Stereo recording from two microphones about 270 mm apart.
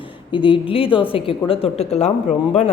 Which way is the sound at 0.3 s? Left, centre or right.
Centre.